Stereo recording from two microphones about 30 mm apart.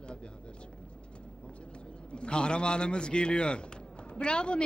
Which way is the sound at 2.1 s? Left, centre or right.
Left.